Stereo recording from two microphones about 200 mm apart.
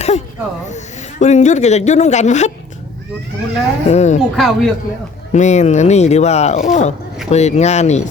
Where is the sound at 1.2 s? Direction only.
35° left (ahead or behind).